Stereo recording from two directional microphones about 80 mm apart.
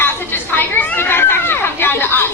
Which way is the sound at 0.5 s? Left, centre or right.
Left.